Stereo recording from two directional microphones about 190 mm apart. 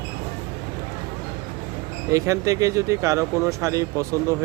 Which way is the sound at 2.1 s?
15° right (ahead or behind).